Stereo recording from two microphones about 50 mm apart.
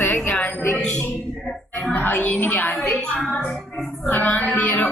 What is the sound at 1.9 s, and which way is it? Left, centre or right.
Speech, left.